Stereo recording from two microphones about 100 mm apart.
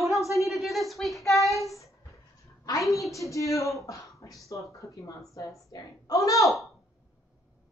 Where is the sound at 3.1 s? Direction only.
30° left (ahead or behind).